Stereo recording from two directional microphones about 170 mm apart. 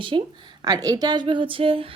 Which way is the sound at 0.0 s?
30° right (ahead or behind).